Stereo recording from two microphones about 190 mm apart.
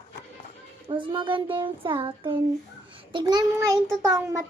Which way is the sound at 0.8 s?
25° right (ahead or behind).